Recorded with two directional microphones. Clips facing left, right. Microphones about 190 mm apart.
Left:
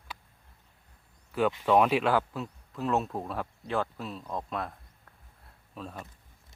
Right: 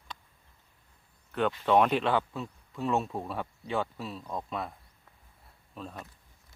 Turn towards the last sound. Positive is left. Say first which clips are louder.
# left 1 dB
turn(degrees=0)  # may be behind; listen again after turning